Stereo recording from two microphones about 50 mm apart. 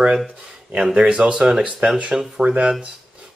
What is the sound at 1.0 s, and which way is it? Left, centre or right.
Speech, right.